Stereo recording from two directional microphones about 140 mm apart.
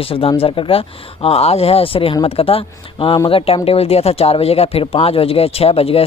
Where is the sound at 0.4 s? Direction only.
40° left (ahead or behind).